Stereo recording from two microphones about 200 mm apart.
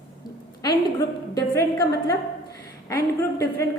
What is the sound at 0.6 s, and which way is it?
A woman's voice, 20° left (ahead or behind).